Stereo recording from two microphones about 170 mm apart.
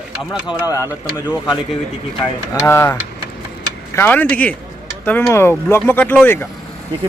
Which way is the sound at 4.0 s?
10° left (ahead or behind).